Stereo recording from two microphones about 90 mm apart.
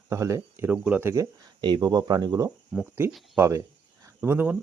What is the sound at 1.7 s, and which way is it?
Speech, 45° right (ahead or behind).